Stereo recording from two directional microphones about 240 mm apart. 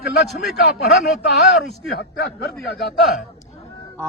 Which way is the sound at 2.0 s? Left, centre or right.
Left.